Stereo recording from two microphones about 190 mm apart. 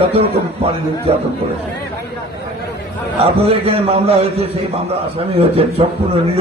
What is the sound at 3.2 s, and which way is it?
A man's voice, 30° right (ahead or behind).